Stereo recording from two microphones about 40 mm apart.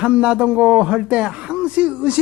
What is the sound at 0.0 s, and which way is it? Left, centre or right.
Speech, right.